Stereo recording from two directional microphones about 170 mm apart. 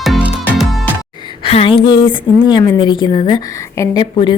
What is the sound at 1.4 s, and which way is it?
A woman's voice, 35° left (ahead or behind).